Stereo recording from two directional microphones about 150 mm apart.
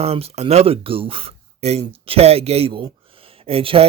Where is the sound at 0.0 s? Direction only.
40° right (ahead or behind).